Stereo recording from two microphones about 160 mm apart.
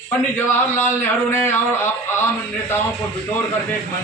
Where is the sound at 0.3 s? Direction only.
15° left (ahead or behind).